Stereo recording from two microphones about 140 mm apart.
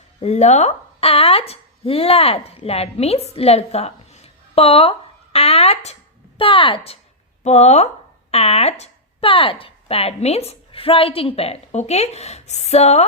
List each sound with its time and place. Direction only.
0.2 s speech: 55° left (ahead or behind)